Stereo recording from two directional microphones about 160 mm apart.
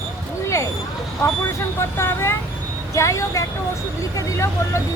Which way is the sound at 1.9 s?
15° left (ahead or behind).